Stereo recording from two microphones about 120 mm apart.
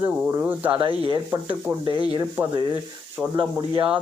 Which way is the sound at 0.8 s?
45° right (ahead or behind).